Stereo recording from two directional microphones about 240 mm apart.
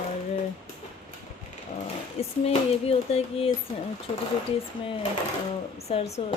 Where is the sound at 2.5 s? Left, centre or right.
Left.